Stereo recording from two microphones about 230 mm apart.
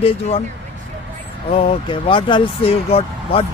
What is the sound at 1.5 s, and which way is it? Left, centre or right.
Speech, left.